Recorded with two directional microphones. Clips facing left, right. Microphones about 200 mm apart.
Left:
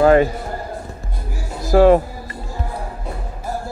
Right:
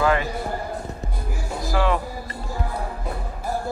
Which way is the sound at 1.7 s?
45° left (ahead or behind).